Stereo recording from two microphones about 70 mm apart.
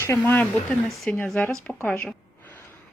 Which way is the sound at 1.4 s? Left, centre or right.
Centre.